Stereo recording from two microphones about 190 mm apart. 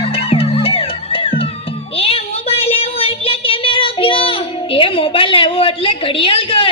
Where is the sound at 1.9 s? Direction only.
30° left (ahead or behind).